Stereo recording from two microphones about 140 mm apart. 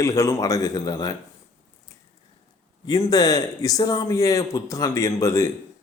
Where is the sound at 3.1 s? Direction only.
25° left (ahead or behind).